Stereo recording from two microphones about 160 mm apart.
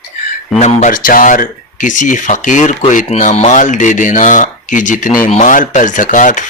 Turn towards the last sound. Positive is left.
turn(degrees=55)  # may be behind; listen again after turning